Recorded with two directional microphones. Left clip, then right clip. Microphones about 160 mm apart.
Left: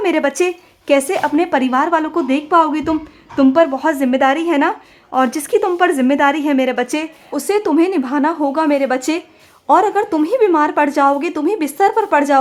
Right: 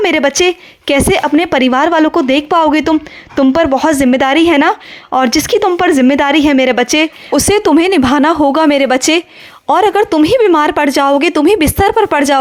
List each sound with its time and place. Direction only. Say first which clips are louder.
0.0 s speech: right 5 dB; 30° right (ahead or behind)